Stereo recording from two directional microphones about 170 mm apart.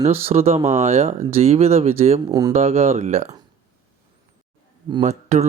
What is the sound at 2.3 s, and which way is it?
Speech, 20° right (ahead or behind).